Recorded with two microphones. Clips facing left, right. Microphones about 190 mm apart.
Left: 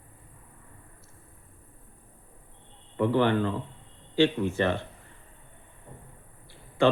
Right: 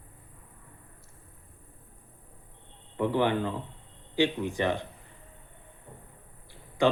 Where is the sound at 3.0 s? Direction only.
15° right (ahead or behind).